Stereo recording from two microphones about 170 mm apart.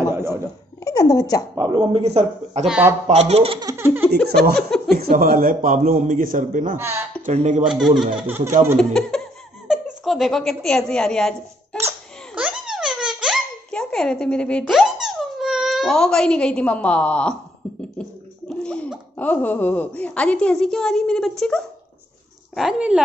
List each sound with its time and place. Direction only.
0.0 s chuckle: 15° right (ahead or behind)
0.8 s speech: 20° left (ahead or behind)
1.5 s speech: 25° right (ahead or behind)
2.6 s a woman's voice: 5° right (ahead or behind)
3.1 s speech: 40° right (ahead or behind)
3.6 s a sound: 15° right (ahead or behind)
4.6 s a woman's voice: 5° left (ahead or behind)
4.9 s a man's voice: 60° right (ahead or behind)
6.8 s a sound: 15° right (ahead or behind)
7.2 s speech: 45° right (ahead or behind)
7.6 s a woman's voice: centre (ahead or behind)
12.4 s a sound: 5° right (ahead or behind)
14.6 s speech: 5° right (ahead or behind)
18.5 s a child's voice: 5° left (ahead or behind)